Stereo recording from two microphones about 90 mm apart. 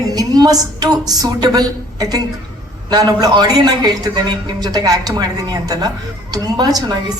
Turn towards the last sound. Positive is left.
turn(degrees=-45)  # may be behind; listen again after turning